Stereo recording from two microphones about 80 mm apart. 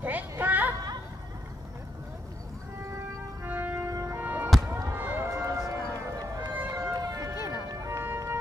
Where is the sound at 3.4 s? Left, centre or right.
Right.